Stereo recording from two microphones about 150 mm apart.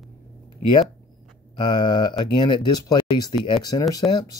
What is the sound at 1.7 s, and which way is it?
Speech, 30° left (ahead or behind).